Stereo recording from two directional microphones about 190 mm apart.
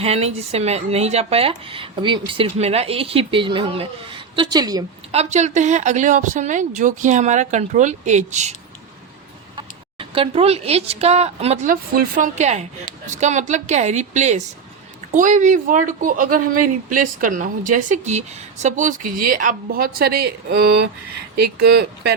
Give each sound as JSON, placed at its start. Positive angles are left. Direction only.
{"t": 0.0, "sound": "speech", "side_deg": -35}
{"t": 5.1, "sound": "speech", "side_deg": -35}
{"t": 9.6, "sound": "a woman's voice", "side_deg": -25}